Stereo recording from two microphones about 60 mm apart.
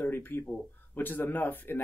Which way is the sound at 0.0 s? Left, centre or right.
Left.